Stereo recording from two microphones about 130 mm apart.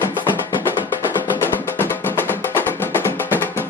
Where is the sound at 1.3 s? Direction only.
15° left (ahead or behind).